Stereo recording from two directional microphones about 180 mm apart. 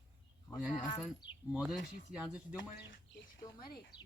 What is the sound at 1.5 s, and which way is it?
Speech, 5° right (ahead or behind).